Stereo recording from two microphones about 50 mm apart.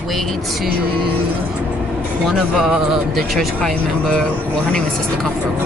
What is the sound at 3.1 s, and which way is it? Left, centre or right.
Speech, centre.